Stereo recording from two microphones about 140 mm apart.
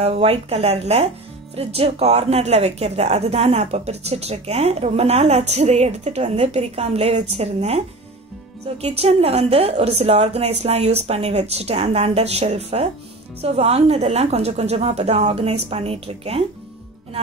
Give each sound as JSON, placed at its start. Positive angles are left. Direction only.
{"t": 0.0, "sound": "speech", "side_deg": -45}
{"t": 8.8, "sound": "speech", "side_deg": -45}